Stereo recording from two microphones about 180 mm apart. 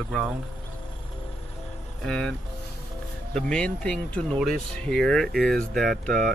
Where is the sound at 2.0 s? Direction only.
5° left (ahead or behind).